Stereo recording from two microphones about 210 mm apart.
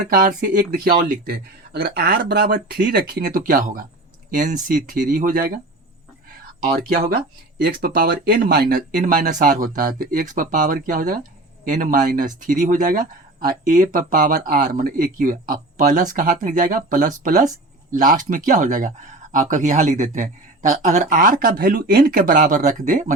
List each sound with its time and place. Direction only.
0.0 s speech: 40° right (ahead or behind)
7.6 s speech: 45° right (ahead or behind)